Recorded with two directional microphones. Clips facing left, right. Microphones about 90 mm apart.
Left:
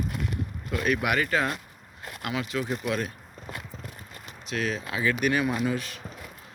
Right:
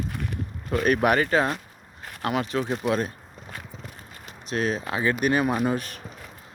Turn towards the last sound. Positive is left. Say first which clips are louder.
# right 3 dB
turn(degrees=-50)  # may be behind; listen again after turning